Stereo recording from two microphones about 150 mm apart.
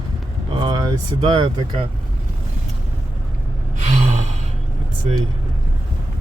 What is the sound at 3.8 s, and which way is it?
Gasp, 50° right (ahead or behind).